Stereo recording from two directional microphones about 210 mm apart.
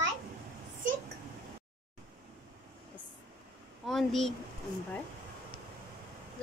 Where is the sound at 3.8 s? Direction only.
Centre (ahead or behind).